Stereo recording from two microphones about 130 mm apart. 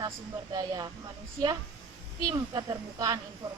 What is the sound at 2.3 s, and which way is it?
Speech, 30° right (ahead or behind).